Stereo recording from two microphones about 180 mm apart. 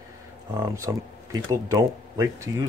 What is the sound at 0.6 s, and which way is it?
Speech, 15° right (ahead or behind).